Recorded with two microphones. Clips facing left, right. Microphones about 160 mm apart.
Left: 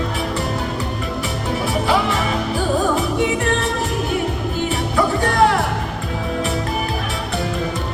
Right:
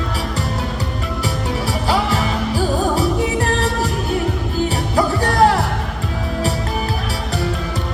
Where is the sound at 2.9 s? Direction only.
35° right (ahead or behind).